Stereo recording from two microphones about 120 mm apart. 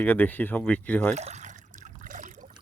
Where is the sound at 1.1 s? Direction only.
70° right (ahead or behind); by 2.5 s 90° right.